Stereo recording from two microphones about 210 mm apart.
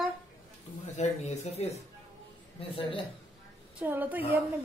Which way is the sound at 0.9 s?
35° left (ahead or behind).